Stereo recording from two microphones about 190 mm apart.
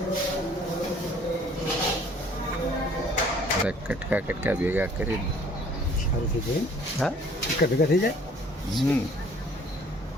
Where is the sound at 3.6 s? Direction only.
5° right (ahead or behind).